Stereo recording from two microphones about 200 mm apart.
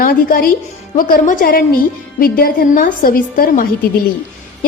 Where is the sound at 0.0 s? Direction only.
45° left (ahead or behind).